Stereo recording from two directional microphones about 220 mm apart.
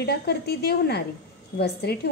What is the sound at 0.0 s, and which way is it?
A woman's voice, 45° left (ahead or behind).